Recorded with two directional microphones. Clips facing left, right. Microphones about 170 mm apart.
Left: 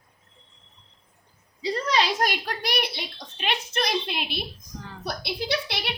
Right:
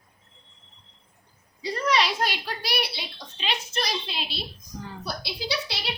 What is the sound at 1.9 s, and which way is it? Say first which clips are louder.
A child's voice: even; 40° left (ahead or behind).